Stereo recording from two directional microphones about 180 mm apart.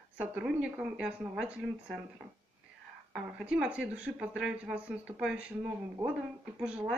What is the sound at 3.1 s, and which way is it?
Speech, 5° right (ahead or behind).